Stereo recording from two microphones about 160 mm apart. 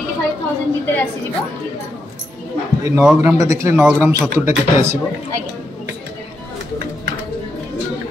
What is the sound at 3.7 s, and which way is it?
Speech, 5° right (ahead or behind).